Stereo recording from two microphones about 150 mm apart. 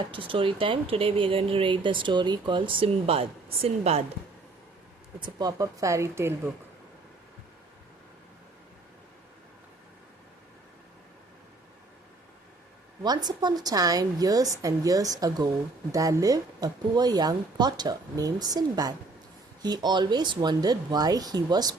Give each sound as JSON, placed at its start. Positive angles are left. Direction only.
{"t": 0.0, "sound": "speech", "side_deg": -35}
{"t": 5.2, "sound": "speech", "side_deg": -25}
{"t": 13.0, "sound": "speech", "side_deg": -25}